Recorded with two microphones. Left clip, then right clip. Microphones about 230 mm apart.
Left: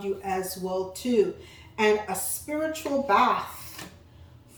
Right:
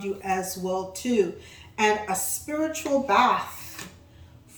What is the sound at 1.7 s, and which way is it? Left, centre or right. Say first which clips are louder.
A woman's voice: right 1 dB; centre.